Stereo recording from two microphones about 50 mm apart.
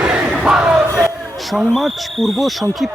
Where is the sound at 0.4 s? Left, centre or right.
Centre.